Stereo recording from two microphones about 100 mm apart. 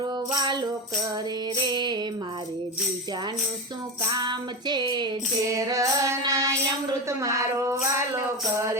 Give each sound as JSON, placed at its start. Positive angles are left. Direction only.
{"t": 0.3, "sound": "music", "side_deg": -45}
{"t": 1.7, "sound": "music", "side_deg": -45}
{"t": 4.1, "sound": "music", "side_deg": -45}
{"t": 5.5, "sound": "music", "side_deg": -35}